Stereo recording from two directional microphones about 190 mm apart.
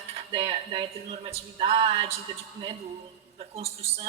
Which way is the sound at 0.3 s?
30° right (ahead or behind).